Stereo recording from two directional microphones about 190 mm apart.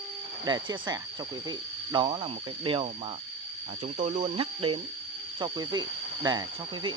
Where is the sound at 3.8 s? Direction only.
40° right (ahead or behind); by 6.9 s 25° right (ahead or behind).